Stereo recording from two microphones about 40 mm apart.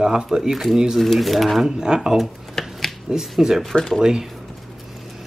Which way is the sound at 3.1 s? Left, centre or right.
Centre.